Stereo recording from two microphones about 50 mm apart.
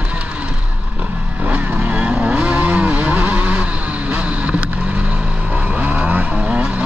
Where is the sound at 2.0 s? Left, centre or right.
Right.